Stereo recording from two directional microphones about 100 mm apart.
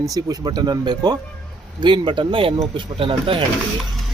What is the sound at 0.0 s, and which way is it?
Speech, 35° right (ahead or behind).